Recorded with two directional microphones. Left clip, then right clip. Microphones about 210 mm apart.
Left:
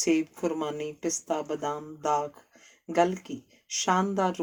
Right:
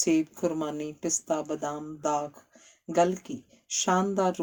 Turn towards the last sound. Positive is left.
turn(degrees=-50)  # may be behind; listen again after turning